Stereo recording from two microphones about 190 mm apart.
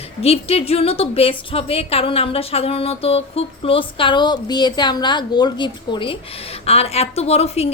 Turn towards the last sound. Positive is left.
turn(degrees=35)  # may be behind; listen again after turning